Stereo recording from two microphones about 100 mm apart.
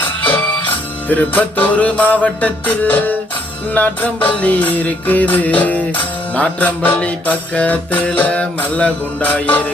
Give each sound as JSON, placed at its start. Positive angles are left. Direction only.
{"t": 0.0, "sound": "music", "side_deg": 15}